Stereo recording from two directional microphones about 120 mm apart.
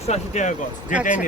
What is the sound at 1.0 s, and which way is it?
Speech, 90° left.